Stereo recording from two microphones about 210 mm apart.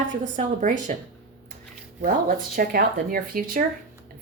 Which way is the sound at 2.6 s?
45° right (ahead or behind).